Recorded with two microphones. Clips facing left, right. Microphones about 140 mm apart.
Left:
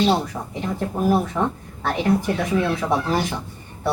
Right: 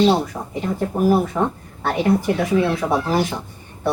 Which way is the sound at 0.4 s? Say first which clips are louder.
Right 1 dB; 15° right (ahead or behind).